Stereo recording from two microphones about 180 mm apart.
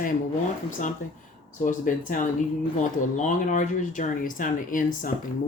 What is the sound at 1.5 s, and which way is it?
Speech, 45° left (ahead or behind).